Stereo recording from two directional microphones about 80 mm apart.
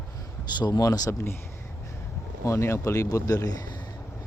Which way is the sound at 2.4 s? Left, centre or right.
Left.